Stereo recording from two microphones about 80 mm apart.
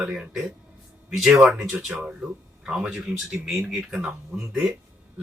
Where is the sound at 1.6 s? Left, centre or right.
Centre.